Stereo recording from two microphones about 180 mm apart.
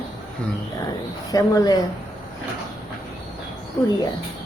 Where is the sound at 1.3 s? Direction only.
20° left (ahead or behind).